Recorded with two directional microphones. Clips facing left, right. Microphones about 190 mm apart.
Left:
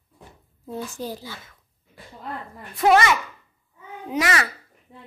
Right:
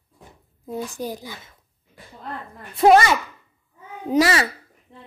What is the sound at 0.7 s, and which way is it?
Speech, 15° right (ahead or behind).